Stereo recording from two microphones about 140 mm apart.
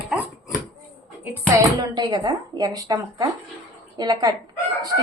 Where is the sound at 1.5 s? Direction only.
25° right (ahead or behind).